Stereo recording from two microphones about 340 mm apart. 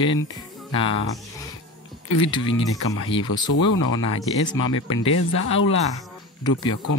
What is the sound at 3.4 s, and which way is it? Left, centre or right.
Speech, left.